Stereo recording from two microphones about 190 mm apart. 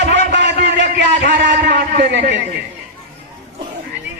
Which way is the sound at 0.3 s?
65° right (ahead or behind).